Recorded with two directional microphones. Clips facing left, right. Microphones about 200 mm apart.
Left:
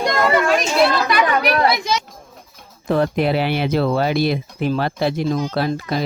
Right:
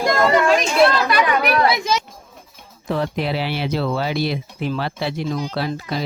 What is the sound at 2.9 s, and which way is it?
Speech, 50° left (ahead or behind).